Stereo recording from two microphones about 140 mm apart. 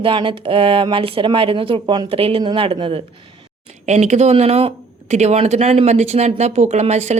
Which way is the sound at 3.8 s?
55° right (ahead or behind).